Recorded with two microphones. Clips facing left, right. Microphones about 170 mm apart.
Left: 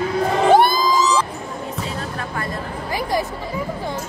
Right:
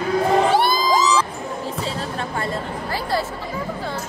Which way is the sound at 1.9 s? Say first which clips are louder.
Right 1 dB; 30° right (ahead or behind).